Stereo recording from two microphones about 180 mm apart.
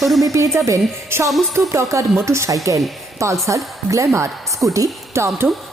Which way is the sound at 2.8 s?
Centre (ahead or behind).